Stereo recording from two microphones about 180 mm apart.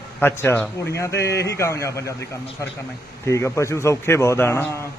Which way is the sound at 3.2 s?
15° left (ahead or behind).